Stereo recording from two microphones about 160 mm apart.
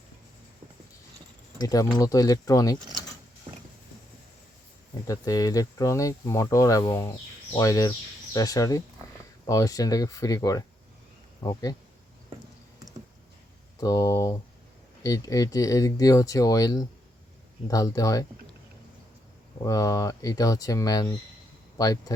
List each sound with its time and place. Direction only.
1.6 s speech: 20° left (ahead or behind)
5.0 s speech: 20° left (ahead or behind)
13.7 s speech: 20° left (ahead or behind)
19.6 s speech: 20° left (ahead or behind)